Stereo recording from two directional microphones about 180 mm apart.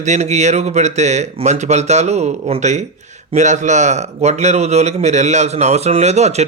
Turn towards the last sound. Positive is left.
turn(degrees=-35)  # may be behind; listen again after turning